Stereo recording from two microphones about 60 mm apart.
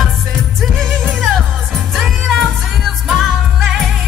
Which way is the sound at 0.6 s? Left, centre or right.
Centre.